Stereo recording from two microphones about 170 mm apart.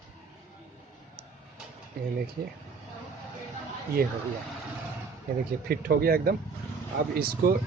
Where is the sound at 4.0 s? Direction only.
60° right (ahead or behind).